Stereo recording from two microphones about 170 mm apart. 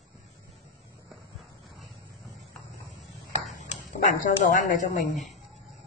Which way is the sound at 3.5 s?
45° left (ahead or behind).